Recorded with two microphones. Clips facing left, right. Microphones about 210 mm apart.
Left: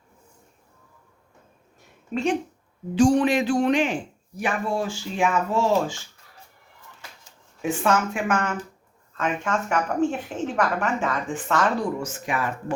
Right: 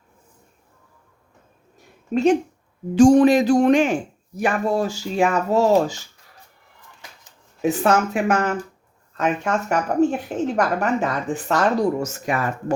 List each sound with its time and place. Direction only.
2.9 s a woman's voice: 45° right (ahead or behind)
7.6 s a woman's voice: 40° right (ahead or behind)